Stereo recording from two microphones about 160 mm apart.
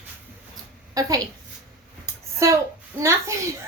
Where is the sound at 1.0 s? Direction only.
20° right (ahead or behind).